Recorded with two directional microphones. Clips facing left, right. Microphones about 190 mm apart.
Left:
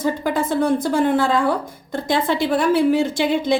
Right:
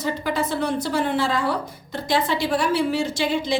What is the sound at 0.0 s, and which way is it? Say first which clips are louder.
A woman's voice: left 4 dB; 50° left (ahead or behind).